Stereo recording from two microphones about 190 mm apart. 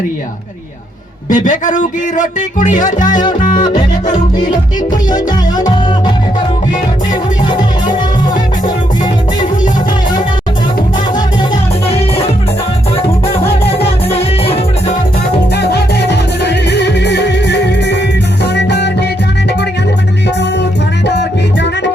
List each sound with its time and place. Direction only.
1.3 s music: 40° left (ahead or behind)
11.9 s music: 30° left (ahead or behind)
13.2 s music: 30° left (ahead or behind)
16.0 s music: 65° left (ahead or behind)